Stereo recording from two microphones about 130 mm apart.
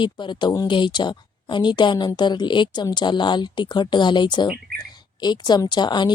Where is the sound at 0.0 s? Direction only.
35° left (ahead or behind).